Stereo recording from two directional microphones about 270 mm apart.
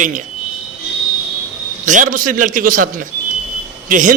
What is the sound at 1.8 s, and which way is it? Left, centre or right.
A man's voice, right.